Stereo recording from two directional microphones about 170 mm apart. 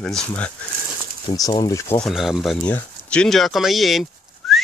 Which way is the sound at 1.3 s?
20° left (ahead or behind).